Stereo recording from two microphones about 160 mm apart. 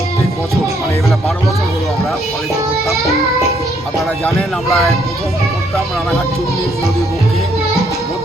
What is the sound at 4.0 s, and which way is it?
Speech, centre (ahead or behind).